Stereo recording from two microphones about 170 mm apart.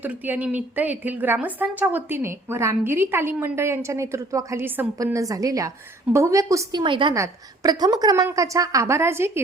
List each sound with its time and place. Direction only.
0.0 s a woman's voice: 10° right (ahead or behind)